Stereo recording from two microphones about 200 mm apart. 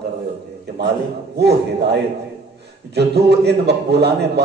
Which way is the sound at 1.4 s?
55° right (ahead or behind).